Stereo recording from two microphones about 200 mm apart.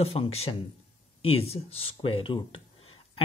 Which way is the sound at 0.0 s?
30° left (ahead or behind).